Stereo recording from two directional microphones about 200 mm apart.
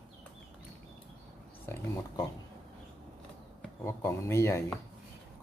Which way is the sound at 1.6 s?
10° left (ahead or behind).